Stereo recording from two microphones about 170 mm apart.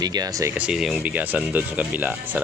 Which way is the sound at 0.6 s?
5° right (ahead or behind).